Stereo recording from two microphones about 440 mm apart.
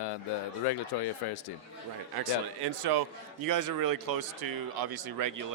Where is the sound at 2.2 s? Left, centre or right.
Right.